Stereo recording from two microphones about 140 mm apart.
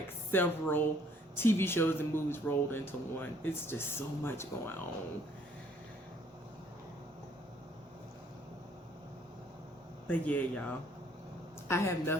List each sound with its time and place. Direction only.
0.3 s speech: 15° left (ahead or behind)
10.1 s a woman's voice: 10° left (ahead or behind)